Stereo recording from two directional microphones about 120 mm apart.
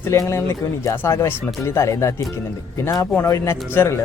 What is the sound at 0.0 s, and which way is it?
Speech, 25° left (ahead or behind).